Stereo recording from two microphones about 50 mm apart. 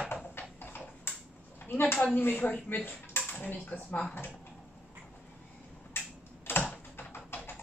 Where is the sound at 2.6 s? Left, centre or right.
Left.